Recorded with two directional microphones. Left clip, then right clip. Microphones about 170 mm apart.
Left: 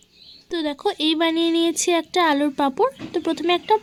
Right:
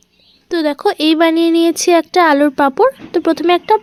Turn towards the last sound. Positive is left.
turn(degrees=-20)  # may be behind; listen again after turning